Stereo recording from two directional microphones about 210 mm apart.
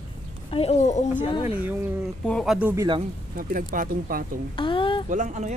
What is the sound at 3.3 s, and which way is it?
Speech, 40° right (ahead or behind).